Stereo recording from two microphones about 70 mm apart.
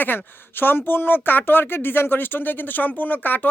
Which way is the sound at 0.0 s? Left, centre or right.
Left.